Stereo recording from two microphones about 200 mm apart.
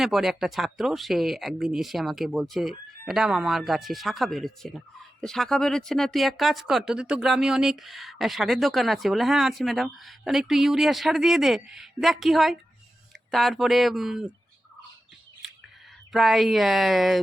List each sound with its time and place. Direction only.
0.0 s speech: centre (ahead or behind)
16.1 s speech: centre (ahead or behind)